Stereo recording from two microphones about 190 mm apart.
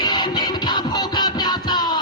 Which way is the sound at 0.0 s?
20° left (ahead or behind).